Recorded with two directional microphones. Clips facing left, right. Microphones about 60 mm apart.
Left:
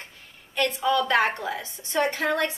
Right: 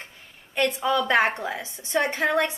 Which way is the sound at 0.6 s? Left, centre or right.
Right.